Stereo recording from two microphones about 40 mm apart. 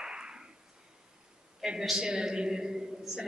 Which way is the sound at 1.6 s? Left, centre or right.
Centre.